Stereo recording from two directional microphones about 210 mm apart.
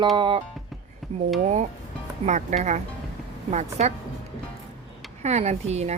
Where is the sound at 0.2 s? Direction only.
25° right (ahead or behind).